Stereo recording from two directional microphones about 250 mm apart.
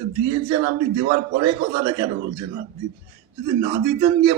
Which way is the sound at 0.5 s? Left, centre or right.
Centre.